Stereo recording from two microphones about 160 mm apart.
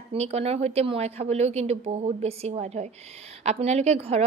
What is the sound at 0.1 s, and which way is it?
A woman's voice, 40° right (ahead or behind).